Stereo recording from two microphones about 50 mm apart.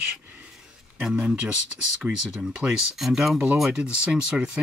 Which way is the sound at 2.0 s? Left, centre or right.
Centre.